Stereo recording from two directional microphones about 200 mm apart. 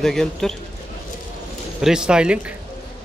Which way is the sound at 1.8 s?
5° right (ahead or behind).